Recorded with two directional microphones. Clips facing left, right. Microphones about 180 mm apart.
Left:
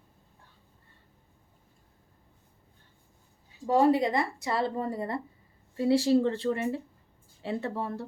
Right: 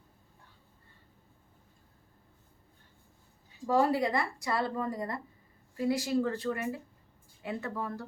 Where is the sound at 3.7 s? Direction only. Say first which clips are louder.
Left 4 dB; 25° left (ahead or behind).